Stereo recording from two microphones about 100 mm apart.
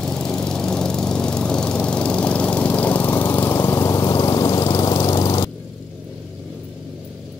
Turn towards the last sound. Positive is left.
turn(degrees=50)  # may be behind; listen again after turning